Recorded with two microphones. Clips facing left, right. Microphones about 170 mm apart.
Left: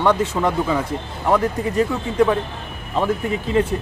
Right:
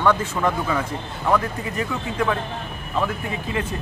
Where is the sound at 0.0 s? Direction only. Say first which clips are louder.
Left 2 dB; 20° left (ahead or behind).